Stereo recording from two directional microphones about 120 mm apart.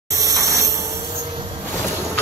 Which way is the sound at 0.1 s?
25° right (ahead or behind).